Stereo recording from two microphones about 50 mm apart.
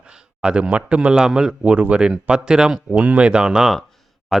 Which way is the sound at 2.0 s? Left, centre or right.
Centre.